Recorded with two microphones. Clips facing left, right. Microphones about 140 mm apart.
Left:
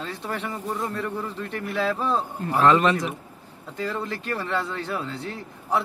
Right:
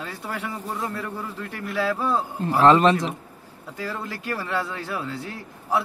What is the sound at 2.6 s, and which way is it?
Speech, 30° right (ahead or behind).